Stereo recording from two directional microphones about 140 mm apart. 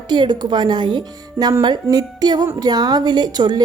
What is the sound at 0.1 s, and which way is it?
A woman's voice, 30° right (ahead or behind).